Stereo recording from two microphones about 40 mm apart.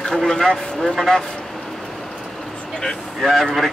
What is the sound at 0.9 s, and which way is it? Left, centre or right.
Speech, centre.